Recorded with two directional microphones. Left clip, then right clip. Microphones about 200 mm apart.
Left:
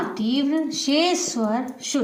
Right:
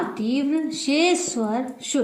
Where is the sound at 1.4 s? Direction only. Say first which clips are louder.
Left 1 dB; 20° left (ahead or behind).